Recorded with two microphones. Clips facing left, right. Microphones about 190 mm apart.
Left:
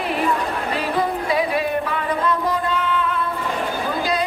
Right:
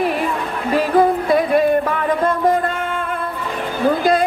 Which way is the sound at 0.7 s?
50° right (ahead or behind).